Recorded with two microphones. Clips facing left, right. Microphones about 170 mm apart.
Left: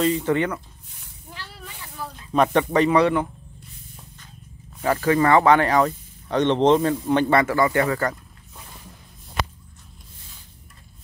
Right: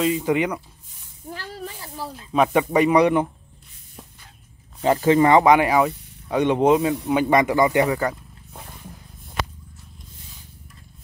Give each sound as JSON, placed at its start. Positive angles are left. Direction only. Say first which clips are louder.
{"t": 0.0, "sound": "speech", "louder": "even", "side_deg": -10}
{"t": 1.3, "sound": "cat", "louder": "right 7 dB", "side_deg": -40}
{"t": 2.3, "sound": "speech", "louder": "even", "side_deg": -5}
{"t": 4.8, "sound": "speech", "louder": "right 3 dB", "side_deg": -20}